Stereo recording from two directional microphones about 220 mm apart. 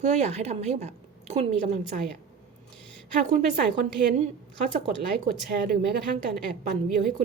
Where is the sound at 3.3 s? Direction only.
40° right (ahead or behind).